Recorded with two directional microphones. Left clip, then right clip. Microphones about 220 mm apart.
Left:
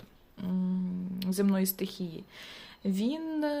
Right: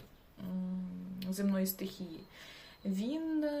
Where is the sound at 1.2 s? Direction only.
50° left (ahead or behind).